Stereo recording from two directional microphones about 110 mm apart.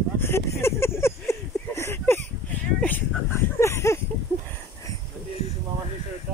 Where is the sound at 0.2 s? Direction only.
25° left (ahead or behind).